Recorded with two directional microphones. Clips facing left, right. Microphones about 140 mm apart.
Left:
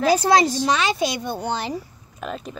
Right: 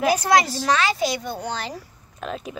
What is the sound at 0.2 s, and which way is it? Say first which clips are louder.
Speech: left 2 dB; 30° left (ahead or behind).